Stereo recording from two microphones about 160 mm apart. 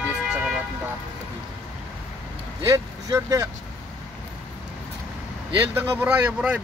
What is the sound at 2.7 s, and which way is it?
Speech, 20° right (ahead or behind).